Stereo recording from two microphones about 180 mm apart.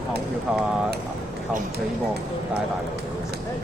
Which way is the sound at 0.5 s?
5° right (ahead or behind).